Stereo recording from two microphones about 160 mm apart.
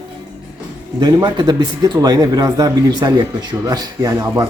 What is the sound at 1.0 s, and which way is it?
Speech, 25° right (ahead or behind).